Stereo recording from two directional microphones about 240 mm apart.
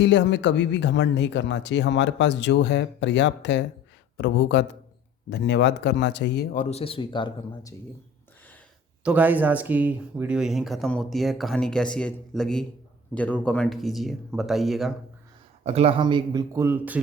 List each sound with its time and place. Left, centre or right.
0.0 s speech: left; by 7.8 s centre
9.0 s speech: centre
15.6 s speech: right; by 17.0 s centre